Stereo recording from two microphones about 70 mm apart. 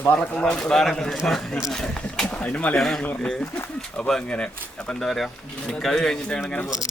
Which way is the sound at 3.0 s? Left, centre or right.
Centre.